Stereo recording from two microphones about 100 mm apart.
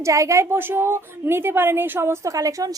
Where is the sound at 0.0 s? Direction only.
30° right (ahead or behind).